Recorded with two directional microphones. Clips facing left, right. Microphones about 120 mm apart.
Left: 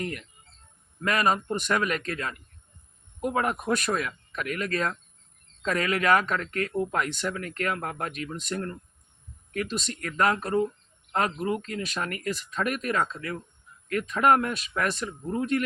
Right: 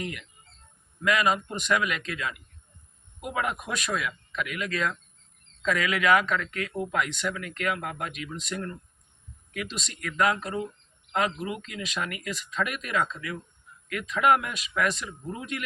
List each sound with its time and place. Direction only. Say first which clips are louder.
0.0 s speech: left 2 dB; 40° left (ahead or behind)